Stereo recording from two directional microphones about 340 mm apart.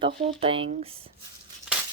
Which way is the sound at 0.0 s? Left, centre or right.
Centre.